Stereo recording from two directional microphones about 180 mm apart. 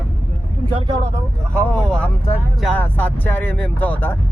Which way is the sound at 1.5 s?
5° left (ahead or behind).